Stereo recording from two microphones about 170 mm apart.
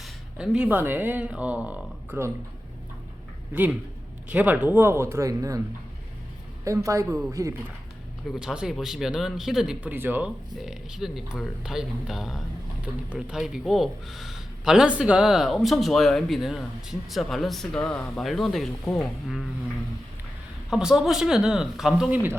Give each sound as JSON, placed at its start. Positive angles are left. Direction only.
{"t": 0.0, "sound": "speech", "side_deg": -5}
{"t": 3.5, "sound": "speech", "side_deg": -10}
{"t": 6.7, "sound": "speech", "side_deg": -20}
{"t": 8.3, "sound": "speech", "side_deg": -5}
{"t": 20.7, "sound": "speech", "side_deg": -5}